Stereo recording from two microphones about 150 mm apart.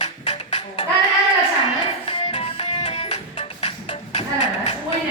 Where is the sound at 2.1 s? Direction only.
40° left (ahead or behind).